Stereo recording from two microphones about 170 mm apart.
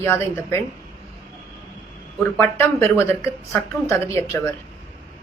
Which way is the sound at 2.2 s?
15° left (ahead or behind).